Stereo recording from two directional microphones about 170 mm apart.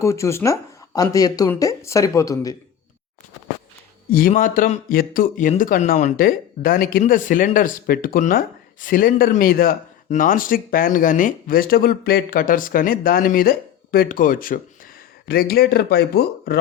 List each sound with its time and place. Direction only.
0.0 s speech: 15° left (ahead or behind)
4.1 s speech: 55° left (ahead or behind)